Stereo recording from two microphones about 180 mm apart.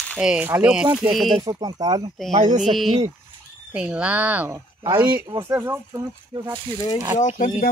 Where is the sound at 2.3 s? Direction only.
45° right (ahead or behind).